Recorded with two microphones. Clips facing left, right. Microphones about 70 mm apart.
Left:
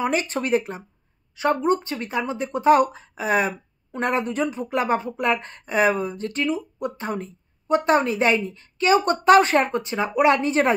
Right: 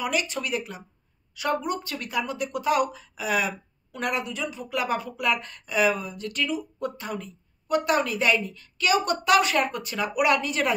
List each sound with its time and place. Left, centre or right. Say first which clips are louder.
0.0 s speech: left 4 dB; left